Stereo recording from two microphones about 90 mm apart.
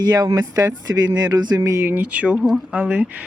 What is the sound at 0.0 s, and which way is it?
Speech, 45° right (ahead or behind).